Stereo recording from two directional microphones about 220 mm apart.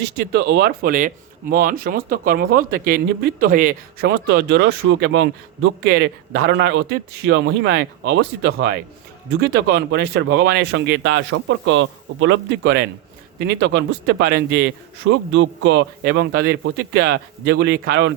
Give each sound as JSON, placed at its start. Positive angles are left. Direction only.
{"t": 0.0, "sound": "speech", "side_deg": -50}
{"t": 9.4, "sound": "speech", "side_deg": -45}
{"t": 15.1, "sound": "speech", "side_deg": -60}